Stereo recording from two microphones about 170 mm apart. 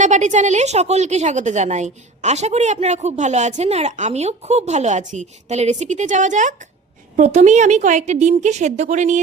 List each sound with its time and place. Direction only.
0.0 s a woman's voice: 45° right (ahead or behind)